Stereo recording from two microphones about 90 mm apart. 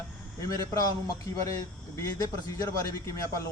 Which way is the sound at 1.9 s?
35° left (ahead or behind).